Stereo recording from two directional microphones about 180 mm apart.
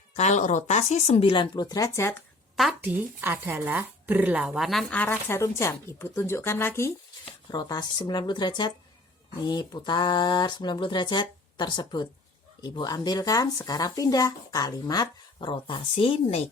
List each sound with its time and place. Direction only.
0.2 s speech: 40° left (ahead or behind); by 2.1 s 15° left (ahead or behind)
2.6 s speech: 5° right (ahead or behind); by 16.4 s 30° left (ahead or behind)